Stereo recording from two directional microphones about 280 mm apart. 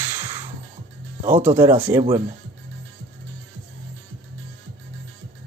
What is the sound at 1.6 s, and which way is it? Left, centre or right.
Speech, centre.